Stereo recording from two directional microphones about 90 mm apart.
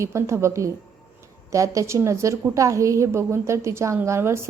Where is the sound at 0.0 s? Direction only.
30° right (ahead or behind).